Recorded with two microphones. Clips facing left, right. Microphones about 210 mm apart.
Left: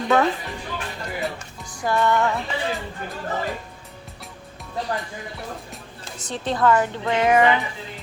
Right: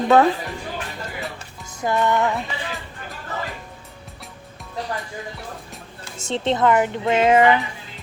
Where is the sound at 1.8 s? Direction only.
20° right (ahead or behind).